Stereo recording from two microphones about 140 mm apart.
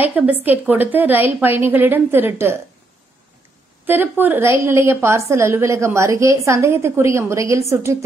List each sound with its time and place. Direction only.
0.0 s a woman's voice: 10° right (ahead or behind)
3.8 s a woman's voice: 15° right (ahead or behind)